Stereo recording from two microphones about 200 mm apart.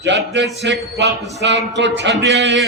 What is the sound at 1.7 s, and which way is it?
Speech, 60° right (ahead or behind).